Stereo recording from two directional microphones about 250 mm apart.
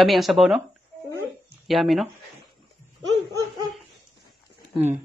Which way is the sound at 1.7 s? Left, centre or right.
Centre.